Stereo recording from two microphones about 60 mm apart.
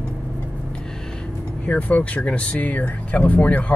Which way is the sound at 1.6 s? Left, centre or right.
Left.